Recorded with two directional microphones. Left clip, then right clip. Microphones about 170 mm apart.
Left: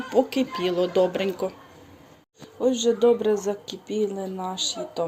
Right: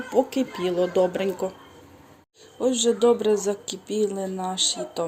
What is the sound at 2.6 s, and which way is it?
Speech, centre (ahead or behind).